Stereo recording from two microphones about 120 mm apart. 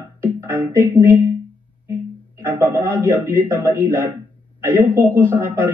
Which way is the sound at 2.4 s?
20° right (ahead or behind).